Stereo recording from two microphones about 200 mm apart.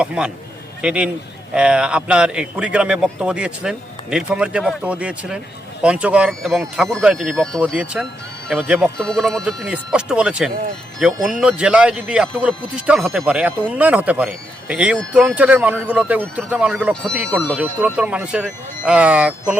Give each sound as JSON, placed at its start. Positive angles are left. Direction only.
{"t": 0.0, "sound": "a man's voice", "side_deg": -5}